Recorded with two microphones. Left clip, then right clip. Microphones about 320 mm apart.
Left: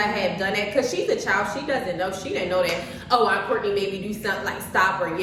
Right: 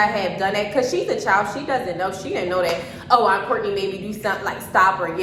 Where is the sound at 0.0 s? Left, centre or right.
Centre.